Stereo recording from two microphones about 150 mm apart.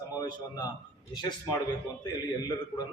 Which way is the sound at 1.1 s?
30° left (ahead or behind).